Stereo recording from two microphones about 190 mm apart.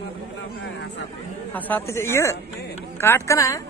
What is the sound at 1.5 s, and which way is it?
Speech, 10° left (ahead or behind).